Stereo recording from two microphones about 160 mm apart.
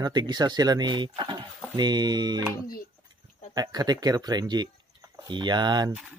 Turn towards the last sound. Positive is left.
turn(degrees=-25)  # may be behind; listen again after turning